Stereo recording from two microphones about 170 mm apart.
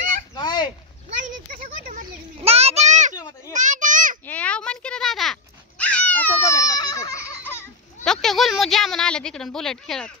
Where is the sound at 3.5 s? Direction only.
45° right (ahead or behind).